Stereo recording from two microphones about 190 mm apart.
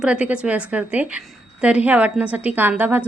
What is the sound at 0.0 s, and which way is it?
A woman's voice, 5° right (ahead or behind).